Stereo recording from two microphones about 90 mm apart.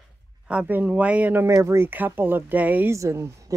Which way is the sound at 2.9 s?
30° right (ahead or behind).